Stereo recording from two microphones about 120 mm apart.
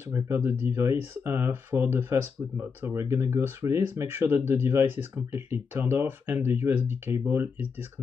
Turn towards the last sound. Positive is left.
turn(degrees=-20)  # may be behind; listen again after turning